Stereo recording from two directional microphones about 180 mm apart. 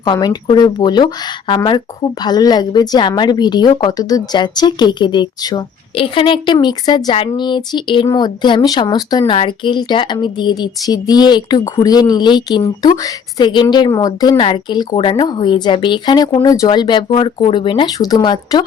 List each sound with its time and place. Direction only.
0.0 s speech: 20° left (ahead or behind)